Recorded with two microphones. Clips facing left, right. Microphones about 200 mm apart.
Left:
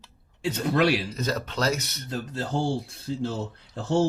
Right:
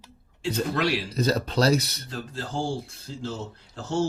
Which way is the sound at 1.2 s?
35° right (ahead or behind).